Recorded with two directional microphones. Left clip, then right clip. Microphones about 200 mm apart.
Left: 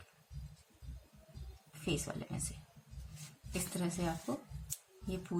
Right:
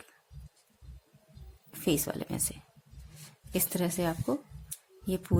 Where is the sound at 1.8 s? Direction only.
55° right (ahead or behind).